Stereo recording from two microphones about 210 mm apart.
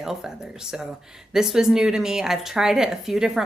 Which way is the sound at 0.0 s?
Centre (ahead or behind).